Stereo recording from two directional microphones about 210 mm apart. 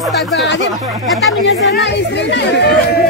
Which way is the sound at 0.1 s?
60° left (ahead or behind).